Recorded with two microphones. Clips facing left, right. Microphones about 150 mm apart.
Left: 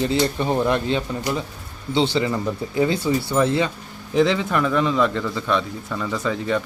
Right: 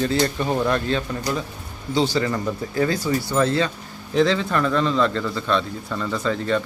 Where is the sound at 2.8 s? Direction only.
25° left (ahead or behind).